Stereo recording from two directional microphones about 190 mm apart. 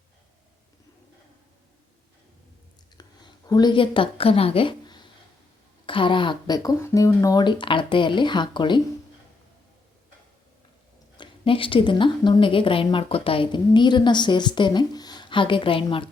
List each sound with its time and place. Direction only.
3.0 s a woman's voice: 20° left (ahead or behind)
11.2 s a woman's voice: 30° left (ahead or behind)